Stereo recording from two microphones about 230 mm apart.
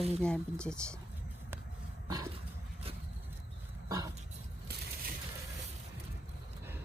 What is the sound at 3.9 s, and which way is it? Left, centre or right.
Dog, centre.